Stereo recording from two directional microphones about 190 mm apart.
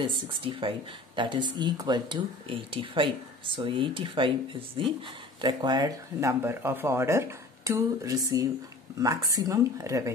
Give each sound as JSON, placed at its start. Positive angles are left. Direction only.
{"t": 0.0, "sound": "speech", "side_deg": -25}